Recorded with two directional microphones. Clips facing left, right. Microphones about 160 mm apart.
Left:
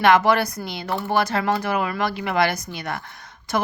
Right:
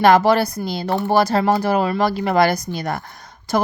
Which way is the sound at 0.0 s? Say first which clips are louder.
Right 3 dB; 35° right (ahead or behind).